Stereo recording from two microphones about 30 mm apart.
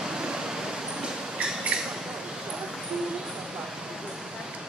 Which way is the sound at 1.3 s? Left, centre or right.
Right.